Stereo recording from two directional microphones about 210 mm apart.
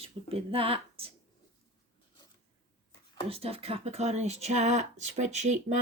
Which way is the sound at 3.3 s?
25° right (ahead or behind).